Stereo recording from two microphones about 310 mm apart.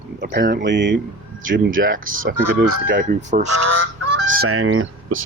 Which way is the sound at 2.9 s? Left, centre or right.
Right.